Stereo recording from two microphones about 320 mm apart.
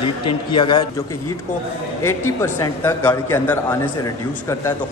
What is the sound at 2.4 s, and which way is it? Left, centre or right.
A man's voice, centre.